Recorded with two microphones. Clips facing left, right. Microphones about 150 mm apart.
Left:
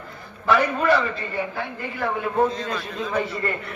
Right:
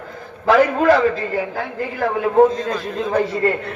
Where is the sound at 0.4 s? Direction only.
90° right.